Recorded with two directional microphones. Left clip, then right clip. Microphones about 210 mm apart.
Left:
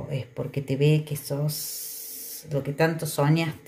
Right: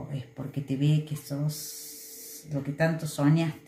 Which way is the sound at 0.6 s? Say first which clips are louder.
Left 6 dB; 50° left (ahead or behind).